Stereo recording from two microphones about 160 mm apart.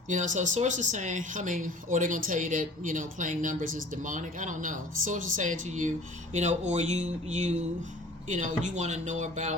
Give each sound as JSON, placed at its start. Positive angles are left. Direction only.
{"t": 0.1, "sound": "speech", "side_deg": -50}